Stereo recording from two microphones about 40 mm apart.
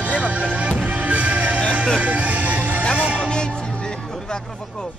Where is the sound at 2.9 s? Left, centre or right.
Right.